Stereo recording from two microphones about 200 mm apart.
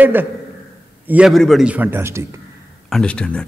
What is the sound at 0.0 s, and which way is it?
A man's voice, 10° right (ahead or behind).